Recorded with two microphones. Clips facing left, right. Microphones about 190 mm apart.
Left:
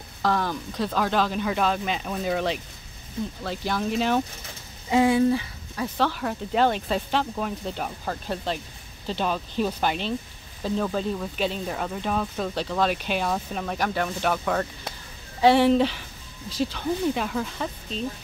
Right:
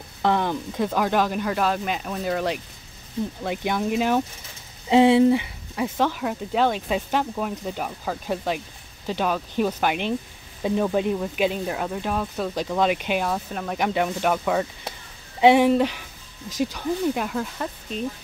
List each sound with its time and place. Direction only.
0.2 s speech: 20° right (ahead or behind); by 2.6 s centre (ahead or behind)
3.4 s speech: 15° right (ahead or behind)
4.8 s speech: 25° right (ahead or behind); by 13.7 s centre (ahead or behind)
13.7 s speech: 15° right (ahead or behind)
16.4 s speech: 45° right (ahead or behind)
16.7 s speech: 5° right (ahead or behind)